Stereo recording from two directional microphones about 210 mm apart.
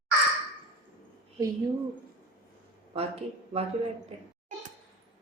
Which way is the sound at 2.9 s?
30° right (ahead or behind).